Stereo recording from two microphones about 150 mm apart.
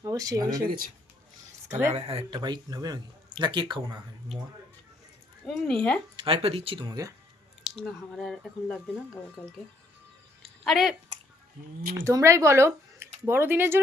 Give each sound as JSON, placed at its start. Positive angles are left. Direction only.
{"t": 0.0, "sound": "speech", "side_deg": -25}
{"t": 1.9, "sound": "speech", "side_deg": -40}
{"t": 5.5, "sound": "speech", "side_deg": 5}
{"t": 6.1, "sound": "speech", "side_deg": -40}
{"t": 7.8, "sound": "speech", "side_deg": 0}
{"t": 10.4, "sound": "a sound", "side_deg": 0}
{"t": 11.9, "sound": "speech", "side_deg": -20}